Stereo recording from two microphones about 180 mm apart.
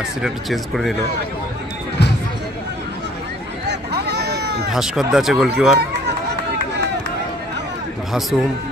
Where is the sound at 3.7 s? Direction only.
65° right (ahead or behind).